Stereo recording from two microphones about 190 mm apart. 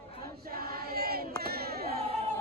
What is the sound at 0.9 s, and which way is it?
Crowd, 55° right (ahead or behind).